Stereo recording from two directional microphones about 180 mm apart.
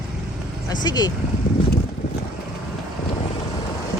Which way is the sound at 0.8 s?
20° left (ahead or behind).